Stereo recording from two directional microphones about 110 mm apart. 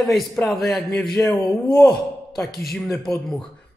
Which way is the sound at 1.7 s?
30° left (ahead or behind).